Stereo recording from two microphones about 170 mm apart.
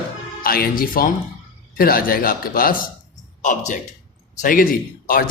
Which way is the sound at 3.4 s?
45° left (ahead or behind).